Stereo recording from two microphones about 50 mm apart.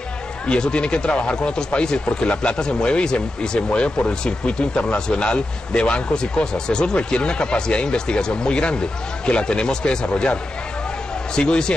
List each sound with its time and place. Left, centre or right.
0.5 s speech: centre